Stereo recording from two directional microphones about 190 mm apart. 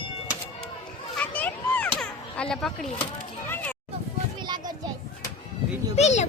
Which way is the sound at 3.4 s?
10° left (ahead or behind).